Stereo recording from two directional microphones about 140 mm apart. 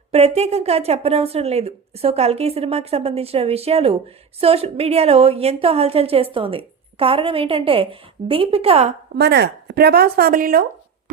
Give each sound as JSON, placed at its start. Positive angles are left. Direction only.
{"t": 0.1, "sound": "a woman's voice", "side_deg": -45}
{"t": 9.7, "sound": "a woman's voice", "side_deg": -90}